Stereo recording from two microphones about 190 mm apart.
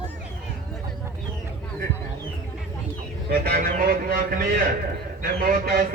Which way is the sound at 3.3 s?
55° right (ahead or behind).